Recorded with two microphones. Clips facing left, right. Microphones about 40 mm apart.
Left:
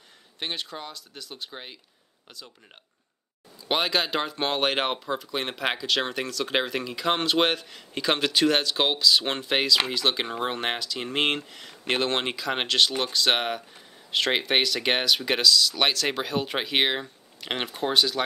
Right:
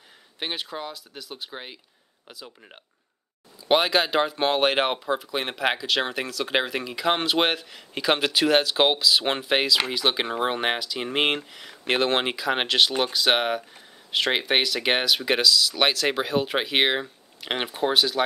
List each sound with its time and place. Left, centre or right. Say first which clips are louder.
0.4 s speech: right 2 dB; centre